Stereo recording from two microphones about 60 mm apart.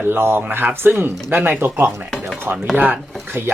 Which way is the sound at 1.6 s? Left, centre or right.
Right.